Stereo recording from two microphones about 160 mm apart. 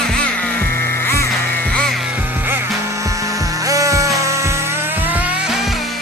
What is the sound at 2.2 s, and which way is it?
Music, 10° right (ahead or behind).